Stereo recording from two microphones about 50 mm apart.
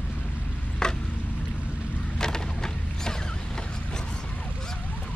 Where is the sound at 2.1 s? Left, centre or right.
Centre.